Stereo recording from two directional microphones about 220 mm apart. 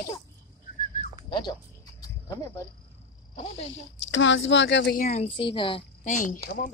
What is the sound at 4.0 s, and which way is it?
Speech, 55° left (ahead or behind).